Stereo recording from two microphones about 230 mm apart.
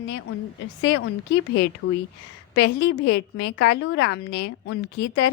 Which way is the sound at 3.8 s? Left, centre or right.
Left.